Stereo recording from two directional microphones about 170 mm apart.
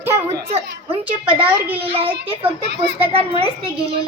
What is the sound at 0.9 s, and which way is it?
Speech, 30° right (ahead or behind).